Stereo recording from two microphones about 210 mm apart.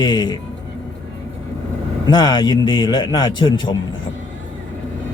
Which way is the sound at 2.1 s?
20° left (ahead or behind).